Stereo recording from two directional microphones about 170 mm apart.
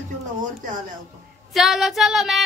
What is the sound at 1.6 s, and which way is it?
Speech, centre (ahead or behind).